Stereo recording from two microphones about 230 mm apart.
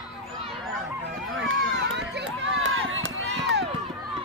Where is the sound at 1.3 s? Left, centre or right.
Right.